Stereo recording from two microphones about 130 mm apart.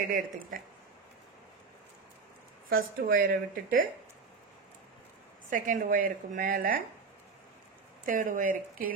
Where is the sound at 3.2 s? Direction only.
90° right.